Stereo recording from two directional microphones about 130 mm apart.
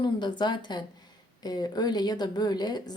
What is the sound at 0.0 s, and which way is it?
A woman's voice, 35° left (ahead or behind).